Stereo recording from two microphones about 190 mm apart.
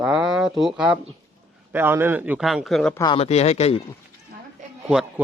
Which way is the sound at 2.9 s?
25° left (ahead or behind).